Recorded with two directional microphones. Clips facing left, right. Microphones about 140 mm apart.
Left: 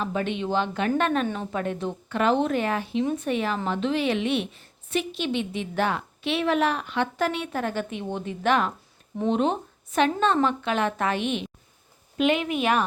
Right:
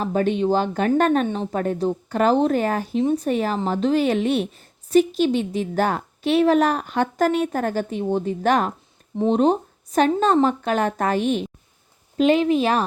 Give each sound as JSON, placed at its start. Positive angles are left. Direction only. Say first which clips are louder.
{"t": 0.0, "sound": "a woman's voice", "louder": "right 7 dB", "side_deg": -40}
{"t": 3.0, "sound": "speech", "louder": "right 7 dB", "side_deg": -30}
{"t": 3.2, "sound": "a woman's voice", "louder": "right 4 dB", "side_deg": -40}